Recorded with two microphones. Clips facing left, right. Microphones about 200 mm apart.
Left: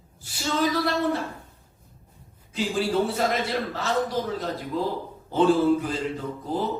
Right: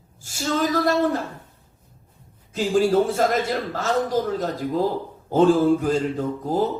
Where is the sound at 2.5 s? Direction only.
45° right (ahead or behind).